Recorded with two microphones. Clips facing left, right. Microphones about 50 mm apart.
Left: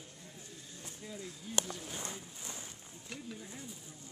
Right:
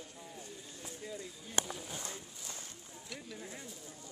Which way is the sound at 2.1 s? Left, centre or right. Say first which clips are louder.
Left 1 dB; centre.